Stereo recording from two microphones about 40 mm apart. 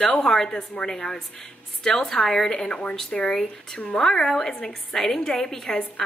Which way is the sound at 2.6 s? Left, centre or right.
Left.